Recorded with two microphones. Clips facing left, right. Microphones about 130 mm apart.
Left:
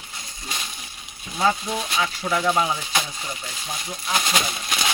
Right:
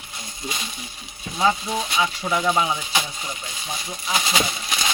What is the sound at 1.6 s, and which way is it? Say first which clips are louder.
Speech: right 2 dB; centre (ahead or behind).